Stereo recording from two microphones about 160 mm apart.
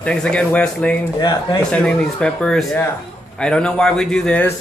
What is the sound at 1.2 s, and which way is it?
Speech, 25° left (ahead or behind).